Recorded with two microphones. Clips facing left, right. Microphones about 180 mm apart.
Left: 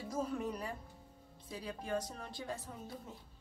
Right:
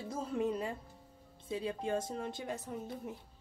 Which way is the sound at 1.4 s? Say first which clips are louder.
Right 6 dB; 25° right (ahead or behind).